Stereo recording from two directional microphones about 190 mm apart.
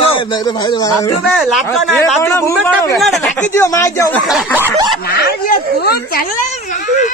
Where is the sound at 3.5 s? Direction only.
15° left (ahead or behind).